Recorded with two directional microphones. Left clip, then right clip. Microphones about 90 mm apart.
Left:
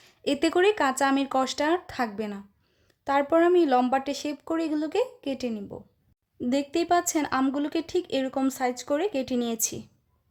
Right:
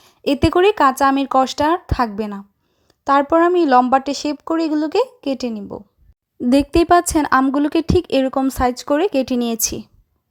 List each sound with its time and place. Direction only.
0.0 s speech: 40° right (ahead or behind)
2.8 s a sound: 45° right (ahead or behind)
3.3 s speech: 40° right (ahead or behind)
6.5 s speech: 75° right (ahead or behind)
7.5 s speech: 55° right (ahead or behind)